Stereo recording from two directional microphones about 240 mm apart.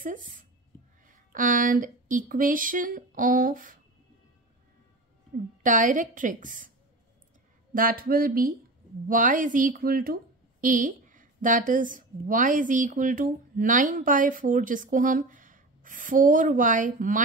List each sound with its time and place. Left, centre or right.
0.0 s speech: right
5.6 s a woman's voice: right
7.7 s a woman's voice: right